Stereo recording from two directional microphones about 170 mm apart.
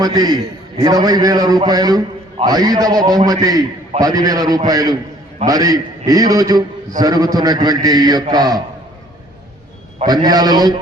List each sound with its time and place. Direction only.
0.0 s a man's voice: 25° right (ahead or behind)
10.1 s a man's voice: 25° right (ahead or behind)